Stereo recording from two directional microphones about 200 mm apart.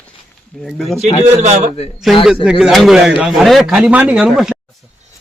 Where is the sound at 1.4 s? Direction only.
35° right (ahead or behind).